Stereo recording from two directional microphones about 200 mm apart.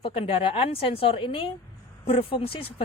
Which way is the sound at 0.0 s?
30° left (ahead or behind).